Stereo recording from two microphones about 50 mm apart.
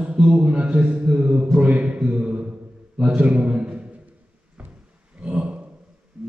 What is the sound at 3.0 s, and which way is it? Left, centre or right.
Speech, right.